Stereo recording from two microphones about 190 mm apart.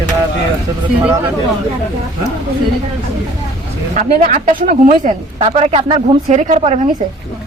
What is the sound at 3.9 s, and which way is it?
Speech, 40° right (ahead or behind).